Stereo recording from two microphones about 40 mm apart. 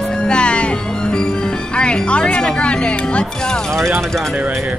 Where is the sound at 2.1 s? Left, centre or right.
Left; by 4.3 s centre.